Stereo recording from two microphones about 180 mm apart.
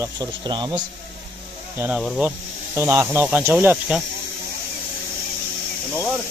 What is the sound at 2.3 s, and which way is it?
Speech, 15° right (ahead or behind).